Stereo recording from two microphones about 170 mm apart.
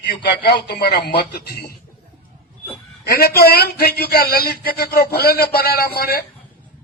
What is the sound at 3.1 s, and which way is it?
A man's voice, 65° left (ahead or behind).